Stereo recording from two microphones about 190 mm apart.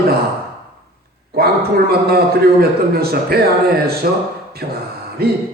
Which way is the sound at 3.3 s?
55° right (ahead or behind).